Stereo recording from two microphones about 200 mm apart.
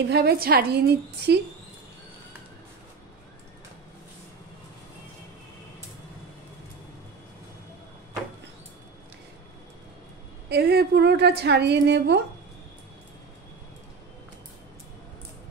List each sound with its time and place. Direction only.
0.1 s a woman's voice: 55° right (ahead or behind)
10.5 s a woman's voice: 55° right (ahead or behind)